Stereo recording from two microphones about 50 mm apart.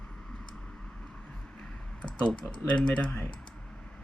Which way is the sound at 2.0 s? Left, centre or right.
Left.